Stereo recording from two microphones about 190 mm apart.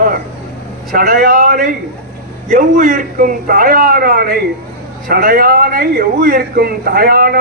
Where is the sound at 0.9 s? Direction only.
50° right (ahead or behind).